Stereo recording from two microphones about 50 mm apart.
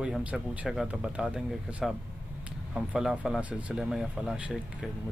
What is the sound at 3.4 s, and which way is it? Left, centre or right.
Speech, right.